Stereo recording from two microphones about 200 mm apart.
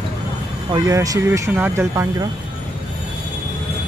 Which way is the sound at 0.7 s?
15° right (ahead or behind).